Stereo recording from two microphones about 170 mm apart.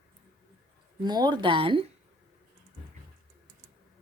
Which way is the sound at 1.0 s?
25° right (ahead or behind).